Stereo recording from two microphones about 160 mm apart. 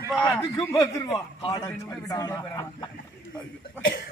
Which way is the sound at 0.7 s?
20° left (ahead or behind).